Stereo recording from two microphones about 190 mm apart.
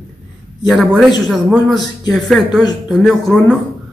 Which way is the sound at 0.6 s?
Centre (ahead or behind).